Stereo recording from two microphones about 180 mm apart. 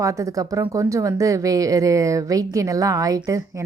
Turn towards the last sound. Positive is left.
turn(degrees=-15)  # may be behind; listen again after turning